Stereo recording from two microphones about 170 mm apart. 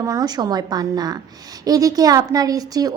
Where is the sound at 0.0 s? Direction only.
20° right (ahead or behind).